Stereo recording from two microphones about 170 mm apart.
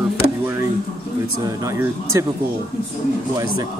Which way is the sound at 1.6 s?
15° right (ahead or behind).